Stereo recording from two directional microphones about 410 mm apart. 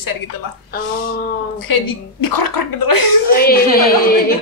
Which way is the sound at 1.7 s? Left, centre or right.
Left.